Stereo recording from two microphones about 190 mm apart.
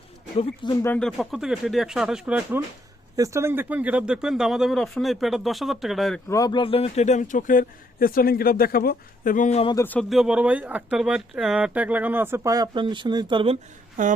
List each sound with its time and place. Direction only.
0.8 s speech: 10° left (ahead or behind)
6.2 s speech: 15° left (ahead or behind); by 9.7 s 35° left (ahead or behind)
9.7 s speech: 10° left (ahead or behind); by 13.6 s 25° right (ahead or behind)
14.0 s speech: 45° right (ahead or behind)